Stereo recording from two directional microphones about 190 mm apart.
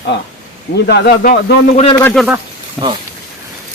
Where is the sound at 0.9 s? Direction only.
55° left (ahead or behind).